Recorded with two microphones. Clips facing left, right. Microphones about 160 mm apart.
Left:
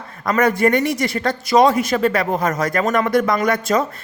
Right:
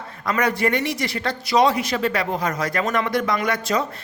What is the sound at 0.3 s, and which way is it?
Speech, 45° left (ahead or behind).